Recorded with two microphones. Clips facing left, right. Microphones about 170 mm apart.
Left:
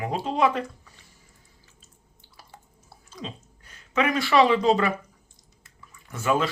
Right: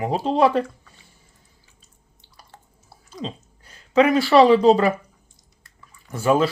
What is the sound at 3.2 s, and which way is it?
A woman's voice, 30° right (ahead or behind).